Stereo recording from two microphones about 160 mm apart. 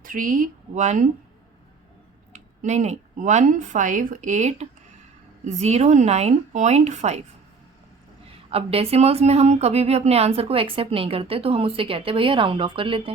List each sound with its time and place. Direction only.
0.0 s speech: 60° right (ahead or behind)
2.3 s a woman's voice: 45° right (ahead or behind)
8.4 s speech: 40° right (ahead or behind)